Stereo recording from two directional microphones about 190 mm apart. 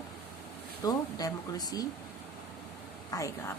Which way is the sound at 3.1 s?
20° left (ahead or behind).